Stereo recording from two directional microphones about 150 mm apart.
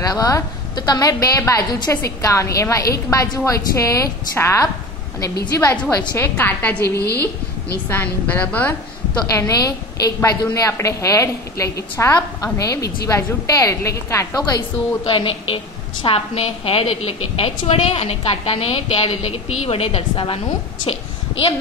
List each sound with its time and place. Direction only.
0.0 s a woman's voice: 25° left (ahead or behind)
7.9 s a woman's voice: 10° left (ahead or behind)
9.3 s a woman's voice: 25° left (ahead or behind)
15.0 s a woman's voice: 35° left (ahead or behind)